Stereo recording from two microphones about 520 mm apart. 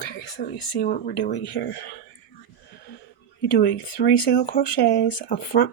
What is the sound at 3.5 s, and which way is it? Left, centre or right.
Speech, left.